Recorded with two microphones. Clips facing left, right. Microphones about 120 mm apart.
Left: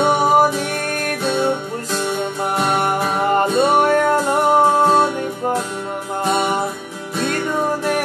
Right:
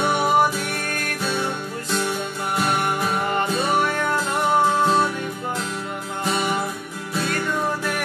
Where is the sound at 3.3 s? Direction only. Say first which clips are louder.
Left 8 dB; 50° left (ahead or behind).